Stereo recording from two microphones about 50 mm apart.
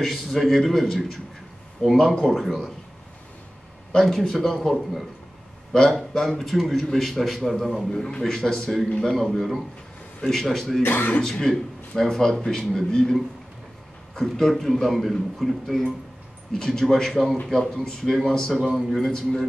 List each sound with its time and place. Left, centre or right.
0.0 s a man's voice: centre
3.9 s speech: centre
5.7 s a man's voice: centre
7.9 s a man's voice: centre
8.8 s a man's voice: left
9.1 s a man's voice: centre
10.8 s speech: left
11.1 s a man's voice: centre
18.5 s a man's voice: centre